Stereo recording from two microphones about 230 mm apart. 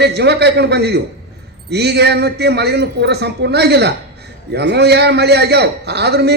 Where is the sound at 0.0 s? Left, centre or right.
Right.